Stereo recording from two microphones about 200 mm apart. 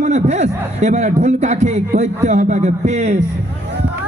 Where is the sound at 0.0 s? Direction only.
35° right (ahead or behind).